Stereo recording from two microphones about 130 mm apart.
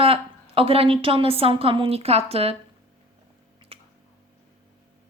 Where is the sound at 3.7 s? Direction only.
45° right (ahead or behind).